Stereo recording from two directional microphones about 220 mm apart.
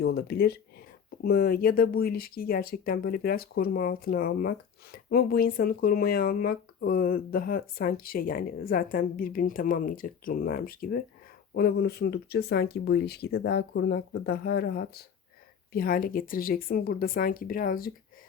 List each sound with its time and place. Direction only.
0.0 s speech: 45° left (ahead or behind)